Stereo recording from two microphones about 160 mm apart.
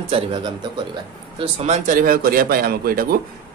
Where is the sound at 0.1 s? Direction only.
35° right (ahead or behind).